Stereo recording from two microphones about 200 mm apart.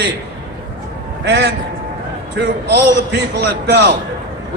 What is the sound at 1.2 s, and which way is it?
Speech, 60° right (ahead or behind).